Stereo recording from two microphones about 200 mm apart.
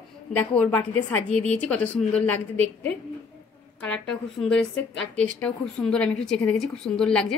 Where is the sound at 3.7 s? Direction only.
5° left (ahead or behind).